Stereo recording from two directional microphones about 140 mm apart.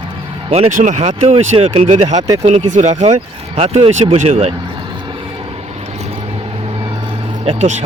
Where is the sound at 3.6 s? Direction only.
45° right (ahead or behind).